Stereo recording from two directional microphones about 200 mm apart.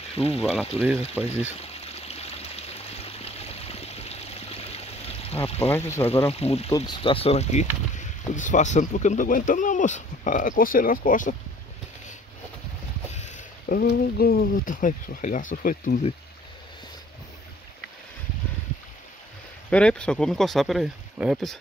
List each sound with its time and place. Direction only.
0.4 s speech: centre (ahead or behind)
1.6 s stream: 30° left (ahead or behind)
5.6 s speech: 10° left (ahead or behind)
6.3 s speech: 30° left (ahead or behind)
13.7 s speech: 45° left (ahead or behind)
19.7 s speech: 5° left (ahead or behind)